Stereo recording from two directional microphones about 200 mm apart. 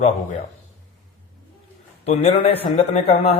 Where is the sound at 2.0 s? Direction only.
35° left (ahead or behind).